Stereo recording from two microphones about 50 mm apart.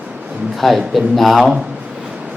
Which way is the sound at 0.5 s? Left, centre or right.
Centre.